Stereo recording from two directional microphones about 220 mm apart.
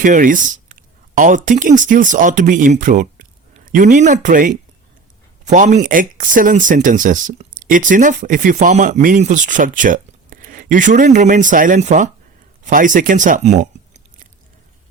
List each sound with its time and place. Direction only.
0.0 s speech: 35° right (ahead or behind)